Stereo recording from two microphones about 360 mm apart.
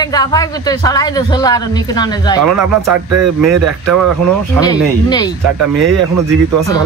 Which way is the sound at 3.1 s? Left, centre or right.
Right.